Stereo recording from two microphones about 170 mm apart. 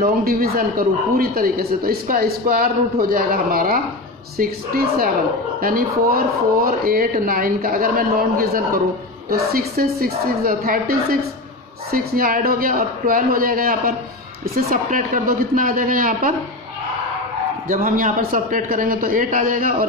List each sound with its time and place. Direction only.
0.0 s a man's voice: 60° right (ahead or behind)
17.6 s a man's voice: 55° right (ahead or behind)